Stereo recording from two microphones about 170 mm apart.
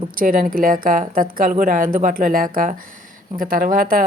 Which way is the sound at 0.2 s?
55° right (ahead or behind).